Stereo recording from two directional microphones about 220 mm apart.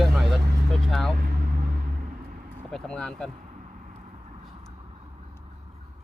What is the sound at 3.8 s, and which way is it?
Vehicle, 30° right (ahead or behind).